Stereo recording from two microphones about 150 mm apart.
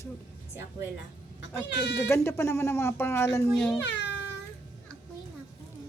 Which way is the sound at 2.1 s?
15° left (ahead or behind).